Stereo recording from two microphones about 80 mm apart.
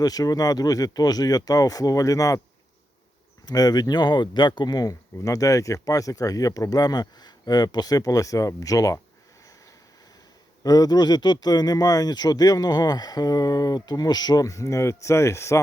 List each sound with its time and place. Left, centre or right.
0.0 s speech: left
3.4 s speech: left
10.6 s speech: left